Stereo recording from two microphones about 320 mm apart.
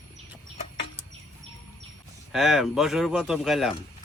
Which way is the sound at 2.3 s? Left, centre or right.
Centre.